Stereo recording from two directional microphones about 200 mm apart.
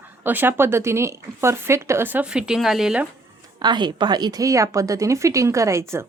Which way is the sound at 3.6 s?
20° right (ahead or behind).